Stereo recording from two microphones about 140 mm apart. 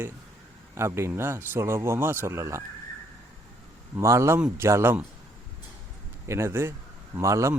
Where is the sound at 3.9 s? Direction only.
20° right (ahead or behind).